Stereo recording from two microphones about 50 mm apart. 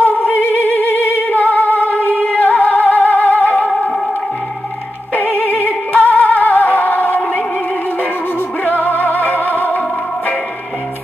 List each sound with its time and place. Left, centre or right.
0.0 s singing: left
5.1 s music: left
8.6 s music: left